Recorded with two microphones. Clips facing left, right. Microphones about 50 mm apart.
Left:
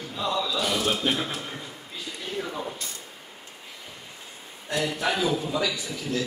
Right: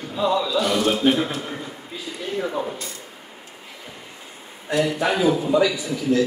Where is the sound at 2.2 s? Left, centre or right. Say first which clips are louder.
Right 7 dB; centre.